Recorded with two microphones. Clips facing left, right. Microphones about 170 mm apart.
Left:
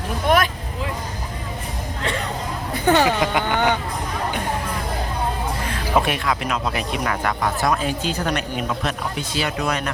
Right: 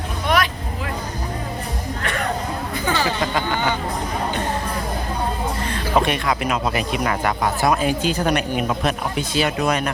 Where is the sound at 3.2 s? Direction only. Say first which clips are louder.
Left 1 dB; 20° left (ahead or behind).